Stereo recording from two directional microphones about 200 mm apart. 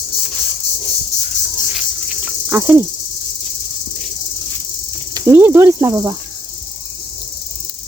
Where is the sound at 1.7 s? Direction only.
5° right (ahead or behind).